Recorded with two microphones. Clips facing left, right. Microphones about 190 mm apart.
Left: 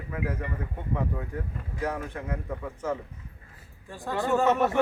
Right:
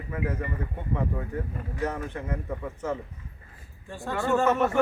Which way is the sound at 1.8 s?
10° left (ahead or behind).